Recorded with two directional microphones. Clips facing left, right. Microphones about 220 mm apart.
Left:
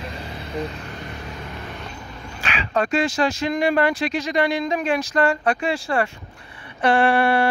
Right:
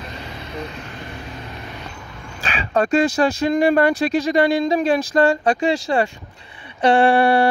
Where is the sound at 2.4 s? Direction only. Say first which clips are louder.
Right 3 dB; 35° right (ahead or behind).